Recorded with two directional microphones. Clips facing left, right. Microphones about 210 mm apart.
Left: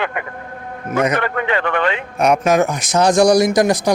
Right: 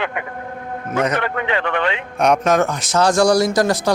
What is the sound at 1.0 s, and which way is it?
Speech, 10° left (ahead or behind).